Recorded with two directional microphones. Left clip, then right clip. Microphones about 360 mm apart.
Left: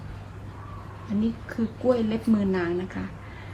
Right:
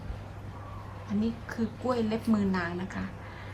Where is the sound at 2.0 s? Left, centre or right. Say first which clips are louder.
Left 3 dB; centre.